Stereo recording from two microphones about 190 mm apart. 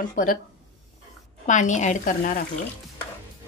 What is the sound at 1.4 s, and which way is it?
Speech, 40° left (ahead or behind).